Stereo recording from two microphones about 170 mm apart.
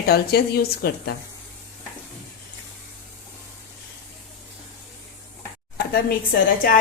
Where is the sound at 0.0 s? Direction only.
70° left (ahead or behind).